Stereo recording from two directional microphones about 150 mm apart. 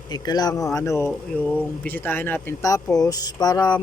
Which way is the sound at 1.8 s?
10° left (ahead or behind).